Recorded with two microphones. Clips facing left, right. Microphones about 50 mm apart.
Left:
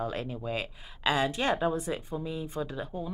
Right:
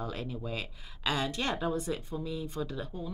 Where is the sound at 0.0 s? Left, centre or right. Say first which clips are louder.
Left 4 dB; left.